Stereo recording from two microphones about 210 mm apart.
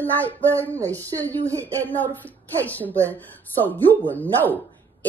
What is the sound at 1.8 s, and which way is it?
Speech, 10° left (ahead or behind).